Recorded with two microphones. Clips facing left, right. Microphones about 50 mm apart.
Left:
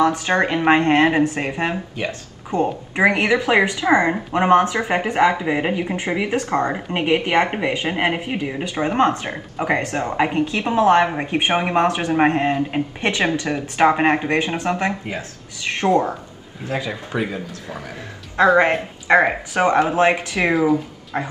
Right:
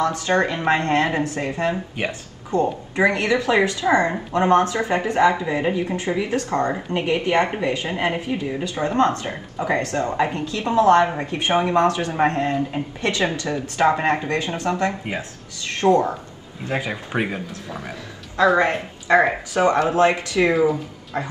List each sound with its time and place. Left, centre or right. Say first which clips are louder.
0.0 s a woman's voice: left 2 dB; left
5.4 s speech: left 1 dB; left
5.9 s a woman's voice: left 1 dB; left
7.0 s a woman's voice: left 2 dB; left
16.7 s speech: even; right
18.5 s speech: left 3 dB; left
20.5 s speech: left 1 dB; centre
21.1 s speech: left 2 dB; left